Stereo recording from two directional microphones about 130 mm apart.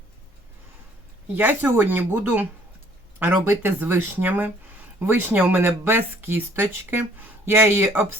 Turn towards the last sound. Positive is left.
turn(degrees=-20)  # may be behind; listen again after turning